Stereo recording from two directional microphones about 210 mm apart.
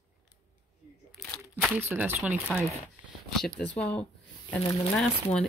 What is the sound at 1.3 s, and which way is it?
Crumpling, 5° left (ahead or behind).